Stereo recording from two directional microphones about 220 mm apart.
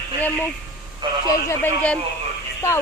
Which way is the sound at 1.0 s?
20° right (ahead or behind).